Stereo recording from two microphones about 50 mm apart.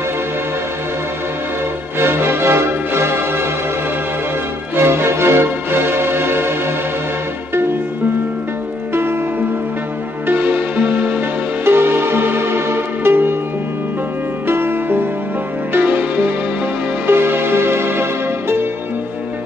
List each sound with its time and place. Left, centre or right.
2.0 s music: right
4.7 s music: right
10.2 s music: right
14.5 s music: right